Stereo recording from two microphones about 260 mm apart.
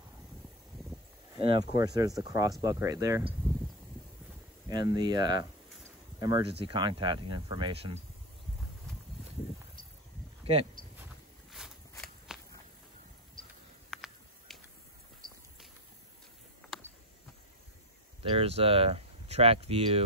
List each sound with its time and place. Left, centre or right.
1.4 s speech: centre
4.6 s speech: centre
10.4 s a sound: right
11.9 s walk: centre
13.8 s a sound: centre
18.2 s speech: right